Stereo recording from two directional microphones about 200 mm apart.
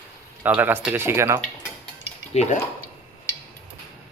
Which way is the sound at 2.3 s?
35° left (ahead or behind).